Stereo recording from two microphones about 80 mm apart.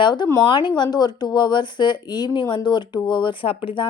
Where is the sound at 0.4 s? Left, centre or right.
Left.